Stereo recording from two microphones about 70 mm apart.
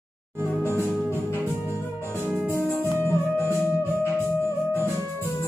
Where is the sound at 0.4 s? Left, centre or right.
Left.